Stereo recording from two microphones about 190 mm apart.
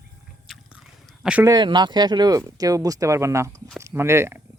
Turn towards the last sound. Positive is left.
turn(degrees=-15)  # may be behind; listen again after turning